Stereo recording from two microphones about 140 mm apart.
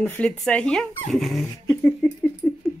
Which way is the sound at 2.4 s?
Centre (ahead or behind).